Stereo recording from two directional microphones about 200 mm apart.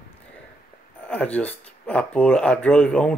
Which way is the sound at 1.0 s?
5° left (ahead or behind).